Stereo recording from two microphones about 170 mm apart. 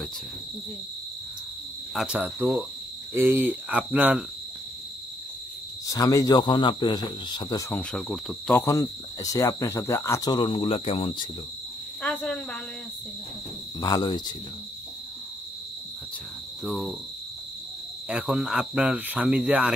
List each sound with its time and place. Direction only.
2.0 s speech: 5° right (ahead or behind)
5.9 s speech: 20° left (ahead or behind)
7.9 s cricket: 5° left (ahead or behind)
8.5 s speech: 15° left (ahead or behind)
12.0 s speech: 10° left (ahead or behind)
13.7 s speech: 25° left (ahead or behind)
16.6 s cricket: centre (ahead or behind)
18.0 s cricket: 5° right (ahead or behind)